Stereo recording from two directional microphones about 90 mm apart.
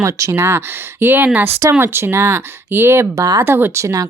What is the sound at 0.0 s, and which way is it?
Speech, 35° right (ahead or behind).